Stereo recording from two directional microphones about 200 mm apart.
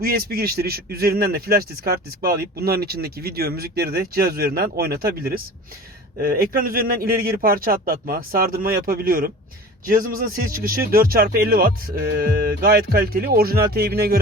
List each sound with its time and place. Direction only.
0.0 s a man's voice: 50° right (ahead or behind)